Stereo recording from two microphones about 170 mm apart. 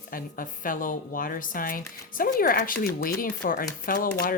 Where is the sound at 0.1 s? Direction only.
55° left (ahead or behind).